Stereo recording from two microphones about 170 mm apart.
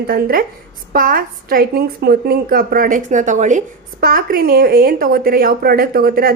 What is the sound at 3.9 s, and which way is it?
A woman's voice, 60° right (ahead or behind).